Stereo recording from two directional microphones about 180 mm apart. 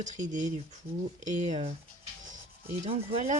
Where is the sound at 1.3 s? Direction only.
40° right (ahead or behind).